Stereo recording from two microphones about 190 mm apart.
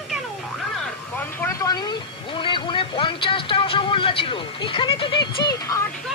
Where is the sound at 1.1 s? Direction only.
10° left (ahead or behind).